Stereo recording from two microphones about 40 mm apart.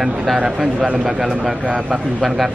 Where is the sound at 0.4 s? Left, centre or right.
Right.